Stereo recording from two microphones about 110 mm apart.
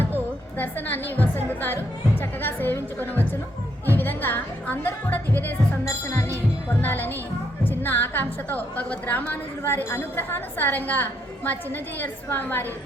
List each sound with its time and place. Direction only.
0.6 s a woman's voice: 15° left (ahead or behind)
6.8 s a woman's voice: 15° left (ahead or behind)